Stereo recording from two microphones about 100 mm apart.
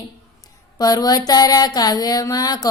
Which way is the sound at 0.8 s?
40° left (ahead or behind).